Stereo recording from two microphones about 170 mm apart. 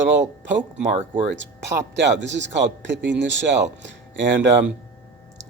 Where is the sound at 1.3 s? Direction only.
90° right.